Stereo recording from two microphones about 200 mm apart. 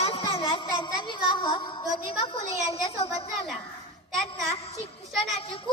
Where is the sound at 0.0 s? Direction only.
30° left (ahead or behind).